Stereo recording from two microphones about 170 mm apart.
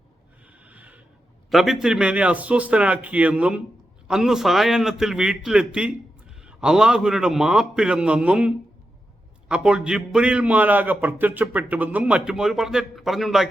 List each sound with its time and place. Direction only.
0.6 s snort: 10° right (ahead or behind)
1.5 s a man's voice: centre (ahead or behind)